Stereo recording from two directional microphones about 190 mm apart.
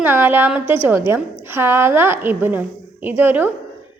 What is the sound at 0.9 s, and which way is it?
A woman's voice, 10° right (ahead or behind).